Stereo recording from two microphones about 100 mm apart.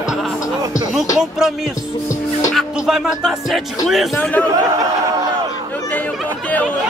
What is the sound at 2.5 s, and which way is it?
Music, centre (ahead or behind).